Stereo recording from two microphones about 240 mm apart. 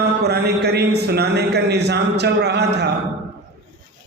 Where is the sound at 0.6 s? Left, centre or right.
Right.